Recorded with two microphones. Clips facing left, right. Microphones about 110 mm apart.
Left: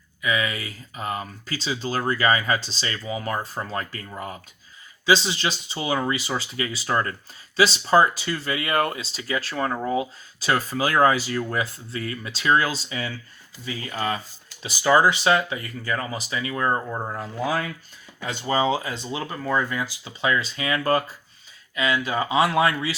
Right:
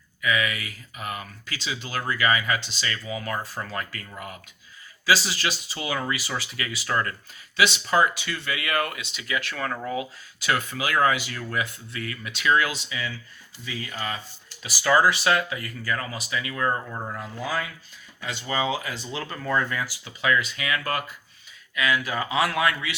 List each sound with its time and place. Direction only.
0.2 s speech: 25° left (ahead or behind)
14.6 s speech: 25° left (ahead or behind)
17.4 s speech: 45° left (ahead or behind); by 19.8 s 10° left (ahead or behind)
19.8 s speech: 25° left (ahead or behind)